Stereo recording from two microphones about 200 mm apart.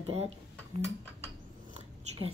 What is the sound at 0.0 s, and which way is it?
Speech, 30° right (ahead or behind).